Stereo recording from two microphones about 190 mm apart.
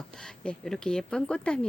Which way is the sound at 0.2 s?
5° left (ahead or behind).